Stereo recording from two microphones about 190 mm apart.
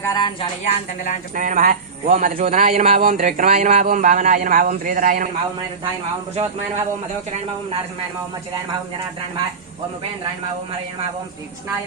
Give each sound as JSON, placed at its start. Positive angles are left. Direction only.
{"t": 0.0, "sound": "music", "side_deg": 20}
{"t": 0.6, "sound": "speech", "side_deg": 40}
{"t": 1.4, "sound": "speech", "side_deg": -45}